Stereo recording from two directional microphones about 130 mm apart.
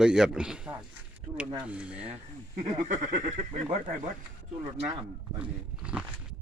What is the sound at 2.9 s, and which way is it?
Speech, 75° right (ahead or behind).